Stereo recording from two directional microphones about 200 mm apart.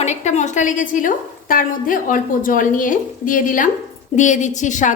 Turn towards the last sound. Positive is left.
turn(degrees=40)  # may be behind; listen again after turning